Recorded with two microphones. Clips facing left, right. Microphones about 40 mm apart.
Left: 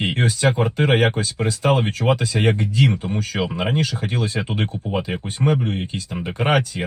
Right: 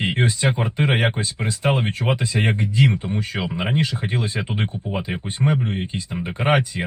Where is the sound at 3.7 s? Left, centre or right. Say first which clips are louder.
Even; right.